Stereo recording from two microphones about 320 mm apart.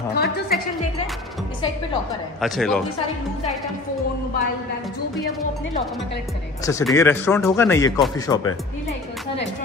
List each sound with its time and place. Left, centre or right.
0.1 s a woman's voice: left
2.4 s a woman's voice: centre
6.6 s speech: centre